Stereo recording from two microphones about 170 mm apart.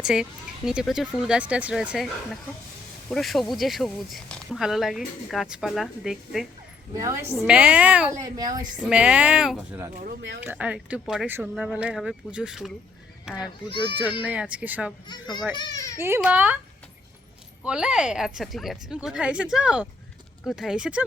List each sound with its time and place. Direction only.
0.0 s speech: 5° right (ahead or behind)
6.9 s a woman's voice: 20° right (ahead or behind)
7.3 s speech: 5° right (ahead or behind)
8.2 s a woman's voice: 20° right (ahead or behind)
8.9 s speech: 5° right (ahead or behind)
10.2 s speech: 90° right
10.4 s speech: 10° right (ahead or behind)
13.4 s a child's voice: 30° left (ahead or behind)
13.9 s speech: 10° right (ahead or behind)
15.5 s a child's voice: 25° left (ahead or behind)
16.0 s speech: 15° right (ahead or behind)
17.6 s speech: 5° right (ahead or behind)